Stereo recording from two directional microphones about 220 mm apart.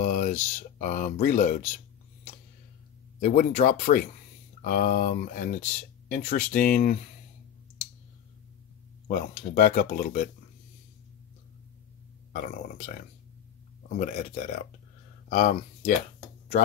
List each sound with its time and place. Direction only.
0.0 s speech: 35° left (ahead or behind)
3.2 s speech: 35° left (ahead or behind)
9.0 s speech: 35° left (ahead or behind)
12.3 s speech: 35° left (ahead or behind)
13.9 s speech: 35° left (ahead or behind)